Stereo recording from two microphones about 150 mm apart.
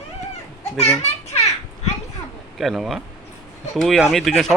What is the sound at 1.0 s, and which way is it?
Children playing, 45° left (ahead or behind).